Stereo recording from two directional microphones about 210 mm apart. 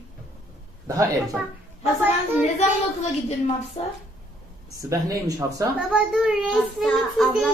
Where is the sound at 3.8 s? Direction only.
35° left (ahead or behind).